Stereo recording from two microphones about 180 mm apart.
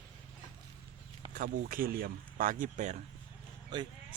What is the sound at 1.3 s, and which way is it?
Speech, 50° right (ahead or behind).